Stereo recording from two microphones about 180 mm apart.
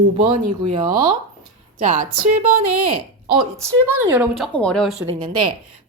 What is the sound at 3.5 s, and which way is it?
Speech, 15° right (ahead or behind).